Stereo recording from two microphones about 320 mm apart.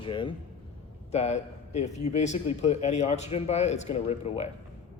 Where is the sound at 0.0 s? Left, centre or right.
Centre.